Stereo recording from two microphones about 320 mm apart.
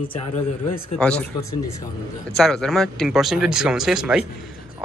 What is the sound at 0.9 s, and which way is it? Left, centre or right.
Speech, centre.